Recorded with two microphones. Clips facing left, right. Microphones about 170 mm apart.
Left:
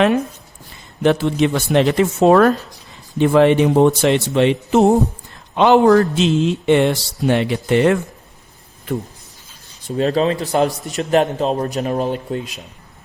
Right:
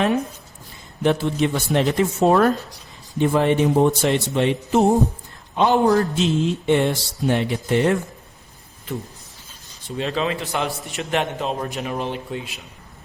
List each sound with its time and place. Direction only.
1.0 s speech: 90° left
9.8 s a man's voice: 40° left (ahead or behind)